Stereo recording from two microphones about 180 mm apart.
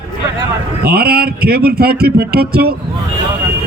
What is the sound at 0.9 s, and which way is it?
A man's voice, 60° right (ahead or behind).